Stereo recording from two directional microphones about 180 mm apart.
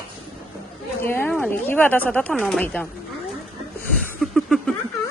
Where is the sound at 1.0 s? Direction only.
10° left (ahead or behind).